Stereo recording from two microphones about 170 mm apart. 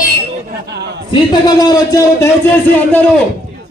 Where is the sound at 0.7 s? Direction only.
80° right.